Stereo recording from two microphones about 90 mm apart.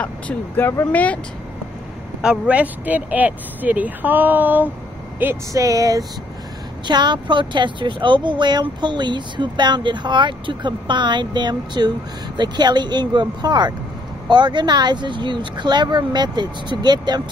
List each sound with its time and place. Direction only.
0.0 s speech: 15° left (ahead or behind)
2.2 s speech: 15° right (ahead or behind)
5.5 s a sound: 40° right (ahead or behind)
6.9 s speech: 55° right (ahead or behind)